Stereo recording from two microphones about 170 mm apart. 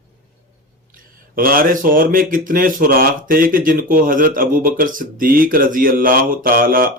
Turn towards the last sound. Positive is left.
turn(degrees=-60)  # may be behind; listen again after turning